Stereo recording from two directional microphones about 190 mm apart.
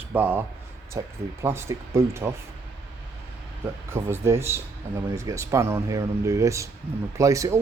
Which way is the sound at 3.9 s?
15° right (ahead or behind).